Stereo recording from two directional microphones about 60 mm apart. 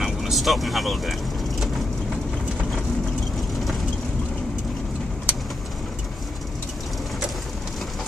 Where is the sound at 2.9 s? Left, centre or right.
Centre.